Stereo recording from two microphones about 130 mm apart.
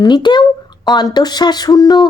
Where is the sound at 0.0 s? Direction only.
35° left (ahead or behind).